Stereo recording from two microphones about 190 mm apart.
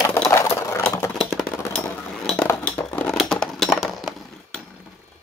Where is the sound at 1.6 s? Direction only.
10° left (ahead or behind).